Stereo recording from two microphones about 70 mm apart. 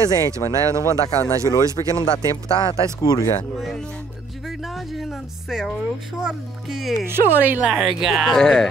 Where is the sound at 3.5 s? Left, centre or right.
Centre.